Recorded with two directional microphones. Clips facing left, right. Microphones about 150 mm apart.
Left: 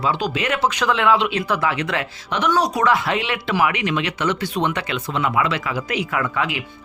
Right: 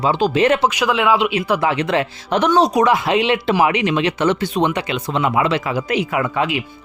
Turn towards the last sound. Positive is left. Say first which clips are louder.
# right 4 dB
turn(degrees=-20)  # may be behind; listen again after turning